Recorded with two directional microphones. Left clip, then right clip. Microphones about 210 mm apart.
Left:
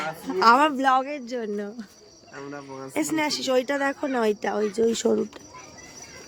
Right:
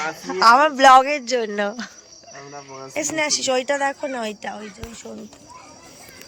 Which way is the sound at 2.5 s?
10° left (ahead or behind).